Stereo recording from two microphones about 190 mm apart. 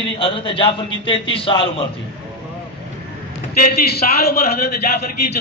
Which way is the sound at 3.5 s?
55° left (ahead or behind).